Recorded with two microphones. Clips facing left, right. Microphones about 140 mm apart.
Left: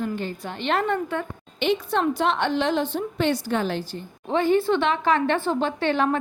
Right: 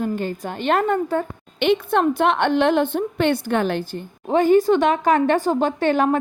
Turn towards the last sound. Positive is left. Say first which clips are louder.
# right 4 dB
turn(degrees=-45)  # may be behind; listen again after turning